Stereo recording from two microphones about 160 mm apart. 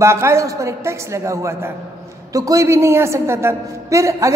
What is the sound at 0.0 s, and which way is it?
A woman's voice, 15° right (ahead or behind).